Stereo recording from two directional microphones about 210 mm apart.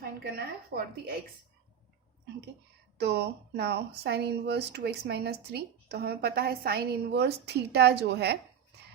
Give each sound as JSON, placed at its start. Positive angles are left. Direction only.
{"t": 0.3, "sound": "speech", "side_deg": -45}
{"t": 3.0, "sound": "speech", "side_deg": -50}